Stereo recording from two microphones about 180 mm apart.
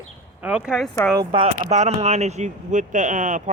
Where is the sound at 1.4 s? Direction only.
40° right (ahead or behind).